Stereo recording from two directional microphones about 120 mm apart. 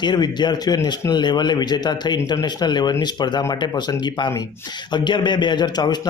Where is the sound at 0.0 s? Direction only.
40° left (ahead or behind).